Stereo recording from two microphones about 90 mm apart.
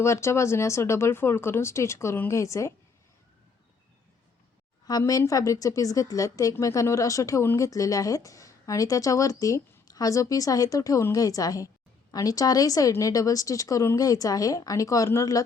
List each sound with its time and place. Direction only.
0.0 s a woman's voice: 30° left (ahead or behind)
4.9 s a woman's voice: 45° left (ahead or behind)